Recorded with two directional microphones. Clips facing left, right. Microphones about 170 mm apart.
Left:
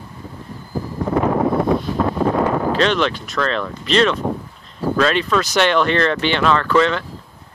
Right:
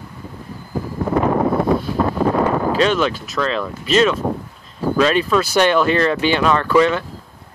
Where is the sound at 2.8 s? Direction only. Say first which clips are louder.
Right 1 dB; 10° right (ahead or behind).